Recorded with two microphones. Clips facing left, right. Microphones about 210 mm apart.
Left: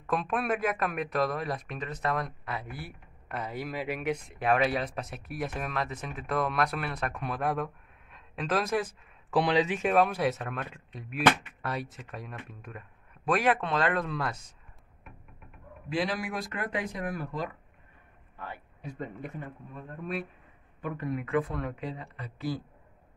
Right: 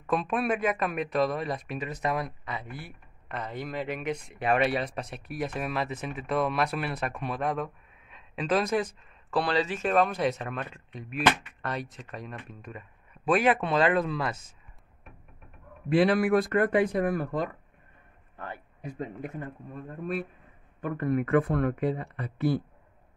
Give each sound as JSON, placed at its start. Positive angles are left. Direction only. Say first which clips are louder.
{"t": 0.1, "sound": "speech", "louder": "right 2 dB", "side_deg": 0}
{"t": 2.4, "sound": "speech", "louder": "even", "side_deg": 5}
{"t": 9.3, "sound": "speech", "louder": "left 2 dB", "side_deg": 15}
{"t": 15.9, "sound": "speech", "louder": "right 9 dB", "side_deg": -60}
{"t": 19.2, "sound": "speech", "louder": "right 3 dB", "side_deg": -45}